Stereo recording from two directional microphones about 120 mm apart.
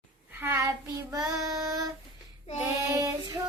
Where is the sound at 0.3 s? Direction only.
15° right (ahead or behind).